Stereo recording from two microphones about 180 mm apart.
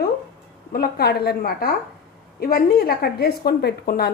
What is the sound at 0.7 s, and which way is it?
A woman's voice, 55° left (ahead or behind).